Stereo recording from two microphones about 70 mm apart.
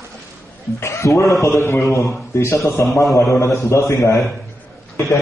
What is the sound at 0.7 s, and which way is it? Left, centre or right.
A man's voice, left.